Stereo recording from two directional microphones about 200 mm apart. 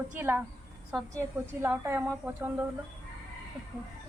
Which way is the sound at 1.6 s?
10° right (ahead or behind).